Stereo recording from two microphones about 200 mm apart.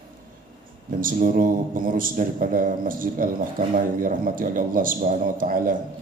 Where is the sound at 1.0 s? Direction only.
45° right (ahead or behind).